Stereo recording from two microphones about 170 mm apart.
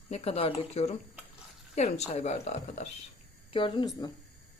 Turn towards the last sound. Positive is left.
turn(degrees=30)  # may be behind; listen again after turning